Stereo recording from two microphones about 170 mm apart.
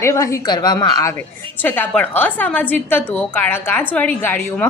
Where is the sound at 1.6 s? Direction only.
10° left (ahead or behind).